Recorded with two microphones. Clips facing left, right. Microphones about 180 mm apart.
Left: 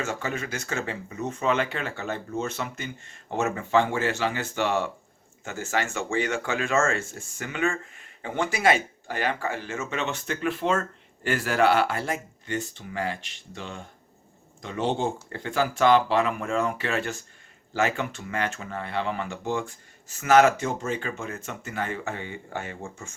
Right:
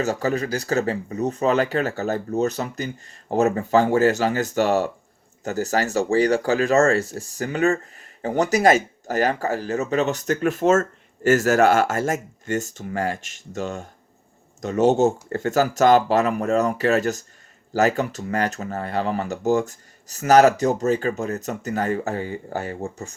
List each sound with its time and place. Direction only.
0.0 s speech: 40° right (ahead or behind)